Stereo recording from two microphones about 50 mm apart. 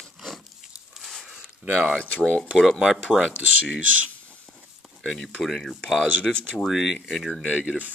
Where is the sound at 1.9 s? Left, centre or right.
Centre.